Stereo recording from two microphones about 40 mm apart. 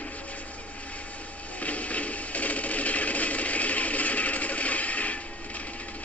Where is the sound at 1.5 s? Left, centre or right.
Left.